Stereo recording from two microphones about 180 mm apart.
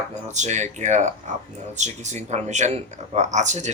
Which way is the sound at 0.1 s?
40° right (ahead or behind).